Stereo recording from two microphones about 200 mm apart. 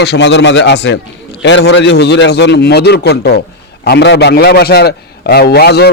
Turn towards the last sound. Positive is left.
turn(degrees=55)  # may be behind; listen again after turning